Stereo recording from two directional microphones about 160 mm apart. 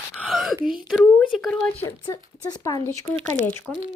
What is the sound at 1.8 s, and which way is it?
Speech, 25° left (ahead or behind).